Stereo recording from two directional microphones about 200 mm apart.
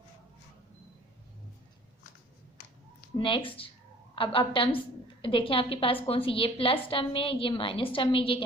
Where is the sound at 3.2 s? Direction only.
25° left (ahead or behind).